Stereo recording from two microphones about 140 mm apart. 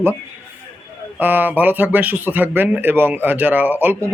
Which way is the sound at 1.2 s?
15° right (ahead or behind).